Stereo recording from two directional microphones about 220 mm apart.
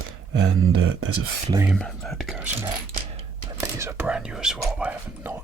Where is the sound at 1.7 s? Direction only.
Centre (ahead or behind).